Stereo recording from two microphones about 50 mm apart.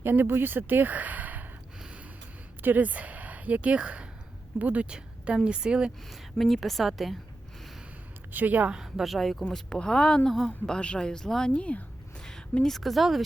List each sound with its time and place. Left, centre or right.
0.0 s speech: right
2.6 s speech: right
4.9 s a sound: centre
5.5 s speech: centre
6.4 s speech: centre
8.3 s a woman's voice: right
8.7 s speech: centre
9.5 s speech: centre
10.2 s speech: centre
10.7 s speech: left
11.5 s speech: left
12.6 s speech: centre